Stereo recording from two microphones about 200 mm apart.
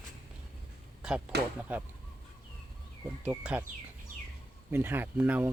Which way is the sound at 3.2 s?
5° right (ahead or behind).